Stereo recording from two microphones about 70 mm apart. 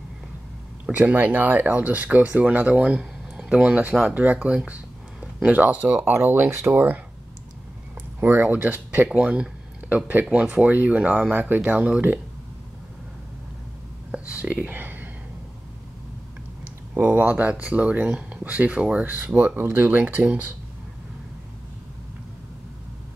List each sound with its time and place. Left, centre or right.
0.9 s speech: right
8.2 s speech: right
14.1 s a sound: centre
16.9 s speech: right